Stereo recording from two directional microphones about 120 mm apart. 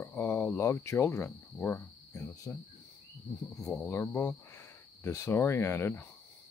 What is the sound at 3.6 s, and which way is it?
Cricket, 5° left (ahead or behind).